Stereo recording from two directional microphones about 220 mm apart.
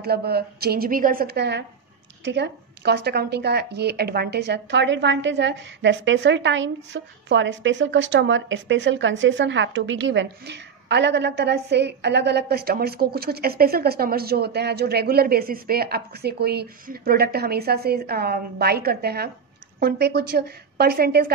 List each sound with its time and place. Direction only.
0.0 s speech: 45° right (ahead or behind)